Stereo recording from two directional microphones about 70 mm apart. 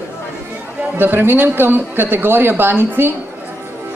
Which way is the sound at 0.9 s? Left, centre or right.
Right.